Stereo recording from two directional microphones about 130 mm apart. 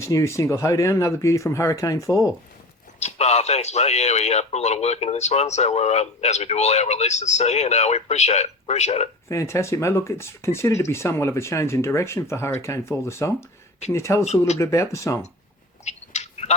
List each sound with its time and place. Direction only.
0.0 s speech: 20° left (ahead or behind)
3.0 s a man's voice: 55° left (ahead or behind)
9.3 s speech: 20° left (ahead or behind)
14.3 s a man's voice: 60° left (ahead or behind)
14.6 s speech: 25° left (ahead or behind)
15.8 s a sound: 60° left (ahead or behind)